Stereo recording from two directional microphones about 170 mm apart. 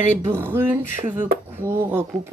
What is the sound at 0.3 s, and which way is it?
Speech, 15° right (ahead or behind).